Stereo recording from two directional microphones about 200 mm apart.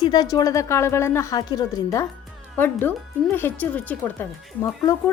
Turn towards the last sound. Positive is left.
turn(degrees=10)  # may be behind; listen again after turning